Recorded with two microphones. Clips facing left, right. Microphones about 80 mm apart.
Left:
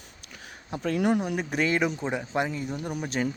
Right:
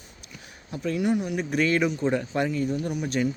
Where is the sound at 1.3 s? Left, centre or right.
Left.